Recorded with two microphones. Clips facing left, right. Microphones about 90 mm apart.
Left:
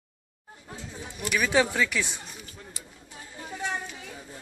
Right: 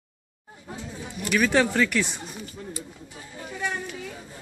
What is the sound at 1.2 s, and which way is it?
Speech, 5° left (ahead or behind).